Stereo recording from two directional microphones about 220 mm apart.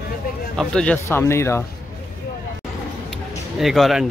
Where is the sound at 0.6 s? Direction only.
5° left (ahead or behind).